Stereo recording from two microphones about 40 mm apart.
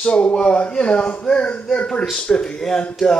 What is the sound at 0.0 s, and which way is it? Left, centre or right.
Speech, left.